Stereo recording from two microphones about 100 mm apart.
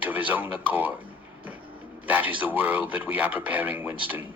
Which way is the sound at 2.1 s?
15° right (ahead or behind).